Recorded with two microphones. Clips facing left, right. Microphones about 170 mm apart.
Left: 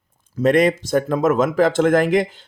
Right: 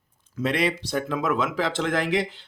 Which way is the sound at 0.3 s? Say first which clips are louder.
Left 9 dB; 45° left (ahead or behind).